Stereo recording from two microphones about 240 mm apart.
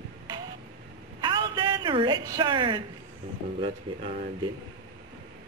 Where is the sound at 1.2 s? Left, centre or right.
Centre.